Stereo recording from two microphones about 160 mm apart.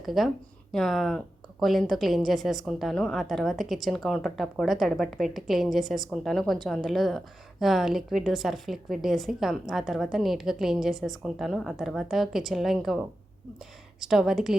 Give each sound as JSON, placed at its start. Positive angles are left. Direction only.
{"t": 0.0, "sound": "a woman's voice", "side_deg": 0}
{"t": 14.0, "sound": "a woman's voice", "side_deg": -5}